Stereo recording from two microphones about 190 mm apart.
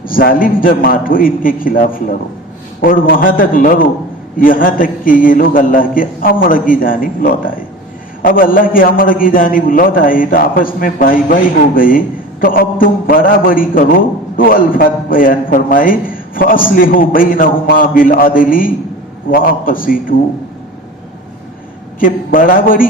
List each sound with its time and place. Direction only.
0.1 s a man's voice: 50° left (ahead or behind)
22.0 s a man's voice: 45° left (ahead or behind)